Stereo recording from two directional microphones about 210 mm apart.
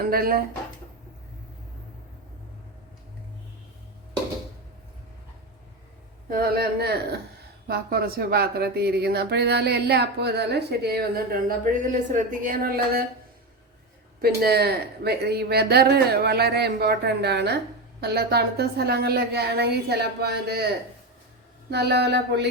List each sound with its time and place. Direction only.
0.0 s speech: 45° right (ahead or behind)
6.3 s speech: 45° right (ahead or behind)
14.2 s speech: 50° right (ahead or behind)
21.7 s speech: 50° right (ahead or behind)